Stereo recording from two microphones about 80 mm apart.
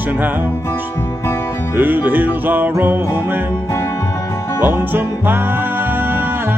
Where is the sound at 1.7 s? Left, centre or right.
Right.